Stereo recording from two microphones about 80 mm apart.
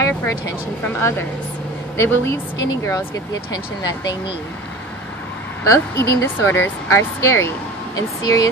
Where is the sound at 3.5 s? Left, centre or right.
Left.